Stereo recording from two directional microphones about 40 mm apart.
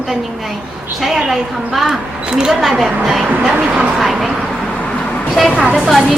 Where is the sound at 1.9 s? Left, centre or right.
Right.